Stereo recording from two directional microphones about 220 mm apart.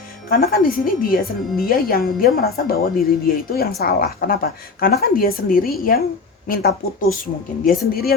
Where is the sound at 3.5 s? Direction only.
45° left (ahead or behind).